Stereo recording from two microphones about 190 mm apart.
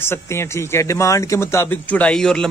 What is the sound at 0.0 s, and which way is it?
A man's voice, 15° left (ahead or behind).